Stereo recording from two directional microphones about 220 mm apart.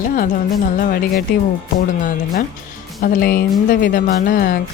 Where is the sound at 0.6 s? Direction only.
40° left (ahead or behind).